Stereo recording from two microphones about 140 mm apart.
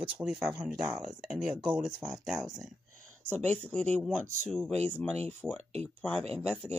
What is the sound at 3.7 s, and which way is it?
Speech, 10° left (ahead or behind).